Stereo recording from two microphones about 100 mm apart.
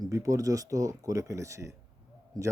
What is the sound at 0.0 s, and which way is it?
A man's voice, 35° right (ahead or behind).